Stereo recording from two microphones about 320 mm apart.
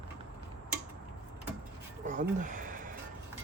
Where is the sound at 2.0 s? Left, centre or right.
Right.